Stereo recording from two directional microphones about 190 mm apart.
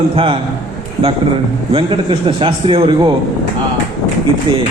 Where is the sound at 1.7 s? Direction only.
25° right (ahead or behind).